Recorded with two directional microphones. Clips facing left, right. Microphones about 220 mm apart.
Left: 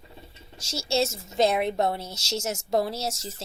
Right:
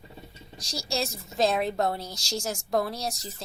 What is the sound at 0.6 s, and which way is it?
Speech, 25° left (ahead or behind).